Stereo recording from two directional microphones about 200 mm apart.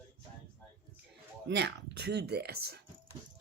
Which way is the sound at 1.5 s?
60° right (ahead or behind).